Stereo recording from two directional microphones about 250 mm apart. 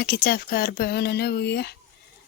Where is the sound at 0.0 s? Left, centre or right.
Left.